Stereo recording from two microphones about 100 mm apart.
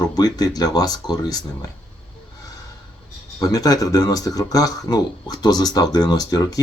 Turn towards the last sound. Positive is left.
turn(degrees=40)  # may be behind; listen again after turning